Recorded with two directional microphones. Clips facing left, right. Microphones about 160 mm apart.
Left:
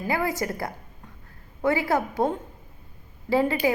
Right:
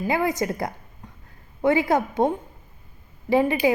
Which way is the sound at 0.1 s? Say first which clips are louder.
Right 2 dB; 20° right (ahead or behind).